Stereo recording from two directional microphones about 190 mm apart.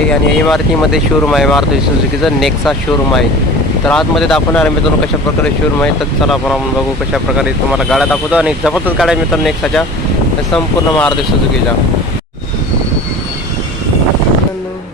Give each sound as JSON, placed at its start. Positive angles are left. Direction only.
{"t": 0.1, "sound": "speech", "side_deg": 0}
{"t": 5.8, "sound": "speech", "side_deg": 0}